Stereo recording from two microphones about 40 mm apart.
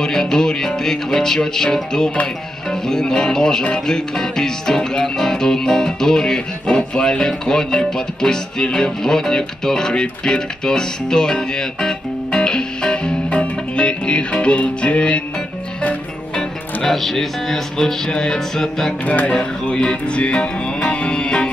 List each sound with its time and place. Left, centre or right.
0.0 s music: centre
16.3 s speech: centre
19.0 s music: left
19.3 s music: left